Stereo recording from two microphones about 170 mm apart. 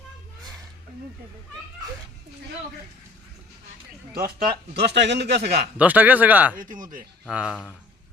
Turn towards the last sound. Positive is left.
turn(degrees=-5)  # may be behind; listen again after turning